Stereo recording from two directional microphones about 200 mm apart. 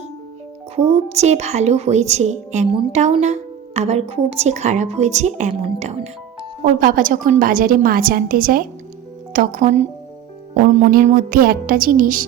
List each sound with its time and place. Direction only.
0.8 s a woman's voice: 30° right (ahead or behind)
10.9 s a woman's voice: 45° right (ahead or behind)